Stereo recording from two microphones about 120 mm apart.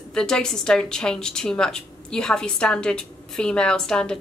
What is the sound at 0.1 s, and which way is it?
A woman's voice, 5° left (ahead or behind).